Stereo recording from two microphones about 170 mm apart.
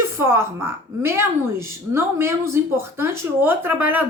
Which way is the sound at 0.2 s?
15° right (ahead or behind).